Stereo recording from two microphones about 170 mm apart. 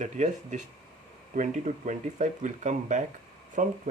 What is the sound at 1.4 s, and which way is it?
Speech, 45° right (ahead or behind).